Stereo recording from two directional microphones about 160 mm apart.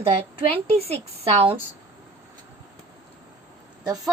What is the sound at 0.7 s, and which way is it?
Speech, 40° right (ahead or behind).